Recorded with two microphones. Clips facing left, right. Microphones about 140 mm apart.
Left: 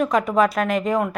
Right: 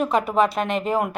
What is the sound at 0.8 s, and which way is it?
Speech, 30° right (ahead or behind).